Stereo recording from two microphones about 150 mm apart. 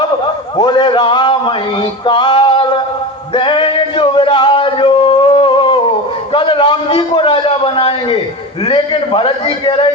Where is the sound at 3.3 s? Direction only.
35° left (ahead or behind).